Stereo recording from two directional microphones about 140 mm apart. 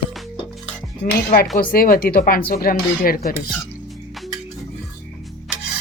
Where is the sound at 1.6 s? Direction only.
85° left.